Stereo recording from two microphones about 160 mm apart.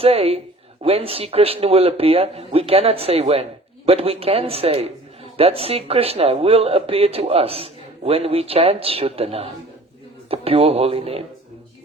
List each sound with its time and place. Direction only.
0.0 s speech: 35° right (ahead or behind)